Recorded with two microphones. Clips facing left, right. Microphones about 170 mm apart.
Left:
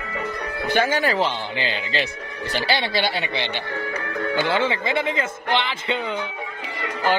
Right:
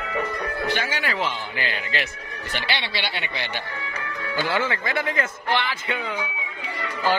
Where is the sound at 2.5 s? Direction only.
40° left (ahead or behind).